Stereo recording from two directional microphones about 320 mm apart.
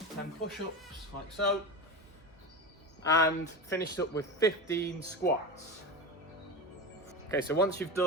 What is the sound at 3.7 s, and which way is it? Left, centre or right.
Speech, left.